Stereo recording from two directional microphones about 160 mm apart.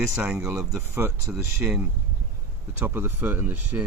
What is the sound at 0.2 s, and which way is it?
Speech, 5° right (ahead or behind).